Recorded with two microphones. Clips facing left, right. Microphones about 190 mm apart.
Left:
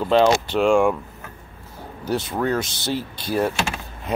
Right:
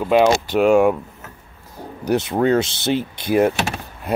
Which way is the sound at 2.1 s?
20° right (ahead or behind).